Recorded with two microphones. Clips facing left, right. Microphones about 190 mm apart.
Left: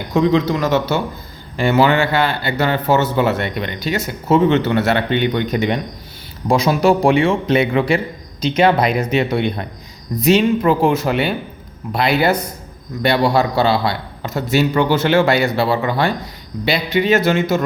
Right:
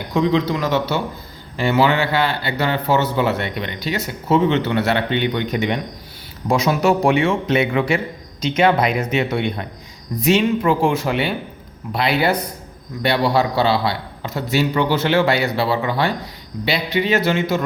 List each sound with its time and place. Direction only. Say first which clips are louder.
0.1 s a man's voice: left 3 dB; 45° left (ahead or behind)